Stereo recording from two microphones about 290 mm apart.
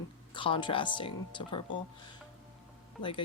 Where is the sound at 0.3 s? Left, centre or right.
Centre.